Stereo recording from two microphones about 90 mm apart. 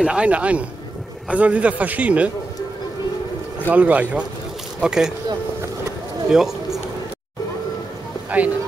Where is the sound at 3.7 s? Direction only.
15° right (ahead or behind).